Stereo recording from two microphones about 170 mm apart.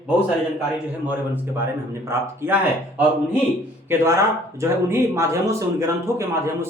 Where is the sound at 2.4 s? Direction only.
15° right (ahead or behind).